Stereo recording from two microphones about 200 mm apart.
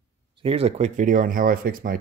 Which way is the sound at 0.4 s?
30° right (ahead or behind).